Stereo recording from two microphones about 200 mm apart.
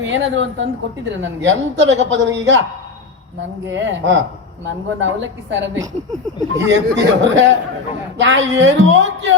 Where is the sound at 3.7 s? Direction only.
70° right (ahead or behind).